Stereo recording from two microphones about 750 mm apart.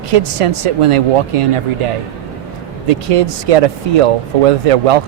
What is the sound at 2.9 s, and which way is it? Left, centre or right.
Speech, right.